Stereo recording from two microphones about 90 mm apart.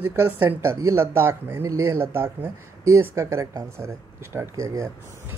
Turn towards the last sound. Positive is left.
turn(degrees=-35)  # may be behind; listen again after turning